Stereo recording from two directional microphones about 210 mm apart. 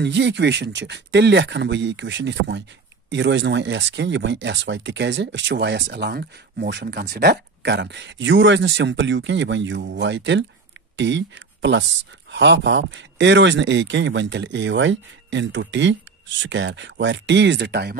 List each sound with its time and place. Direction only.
0.0 s speech: 55° right (ahead or behind)